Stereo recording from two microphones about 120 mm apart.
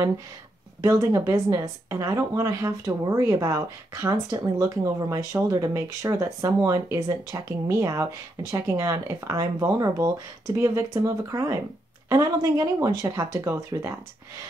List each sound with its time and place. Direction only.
0.8 s speech: 25° right (ahead or behind)